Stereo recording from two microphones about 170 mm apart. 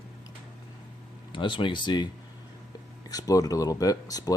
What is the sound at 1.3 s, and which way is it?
Speech, 30° left (ahead or behind).